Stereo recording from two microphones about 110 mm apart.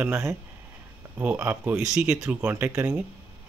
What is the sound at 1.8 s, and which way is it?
Speech, 5° right (ahead or behind).